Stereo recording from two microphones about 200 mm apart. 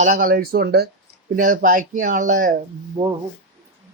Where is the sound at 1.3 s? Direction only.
40° right (ahead or behind).